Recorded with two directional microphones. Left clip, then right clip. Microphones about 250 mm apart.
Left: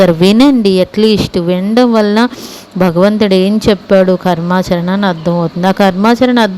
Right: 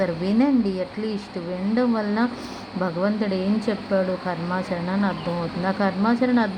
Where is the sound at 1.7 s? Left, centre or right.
Left.